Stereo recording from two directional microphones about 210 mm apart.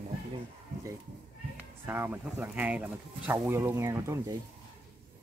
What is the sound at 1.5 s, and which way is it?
Speech, 10° right (ahead or behind).